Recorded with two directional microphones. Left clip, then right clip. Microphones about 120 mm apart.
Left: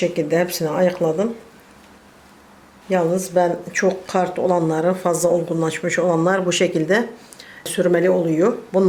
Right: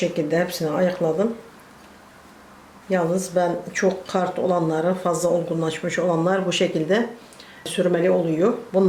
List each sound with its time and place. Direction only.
0.0 s speech: 25° left (ahead or behind)
2.9 s speech: 25° left (ahead or behind)